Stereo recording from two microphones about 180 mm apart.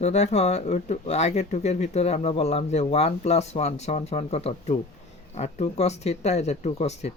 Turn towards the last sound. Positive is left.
turn(degrees=35)  # may be behind; listen again after turning